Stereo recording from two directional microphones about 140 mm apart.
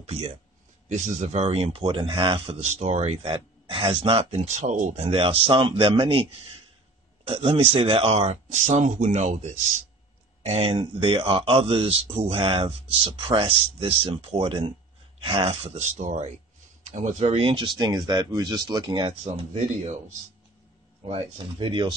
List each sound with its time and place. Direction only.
0.0 s speech: 45° right (ahead or behind)
2.7 s speech: 55° right (ahead or behind)
7.2 s speech: 45° right (ahead or behind); by 9.5 s 60° right (ahead or behind)
10.4 s speech: 45° right (ahead or behind)
16.0 s speech: 55° right (ahead or behind)
16.8 s a sound: 60° right (ahead or behind)
17.2 s speech: 45° right (ahead or behind)
17.7 s speech: 30° right (ahead or behind)
19.3 s speech: 45° right (ahead or behind)
21.0 s speech: 40° right (ahead or behind)